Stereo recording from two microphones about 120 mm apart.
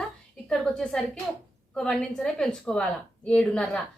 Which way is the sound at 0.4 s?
5° left (ahead or behind).